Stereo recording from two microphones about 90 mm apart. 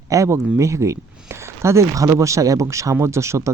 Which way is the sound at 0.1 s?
35° right (ahead or behind).